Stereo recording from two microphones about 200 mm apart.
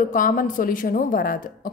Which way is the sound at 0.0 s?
40° left (ahead or behind).